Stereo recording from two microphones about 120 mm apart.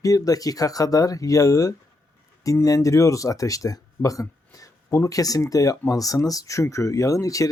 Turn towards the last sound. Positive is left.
turn(degrees=30)  # may be behind; listen again after turning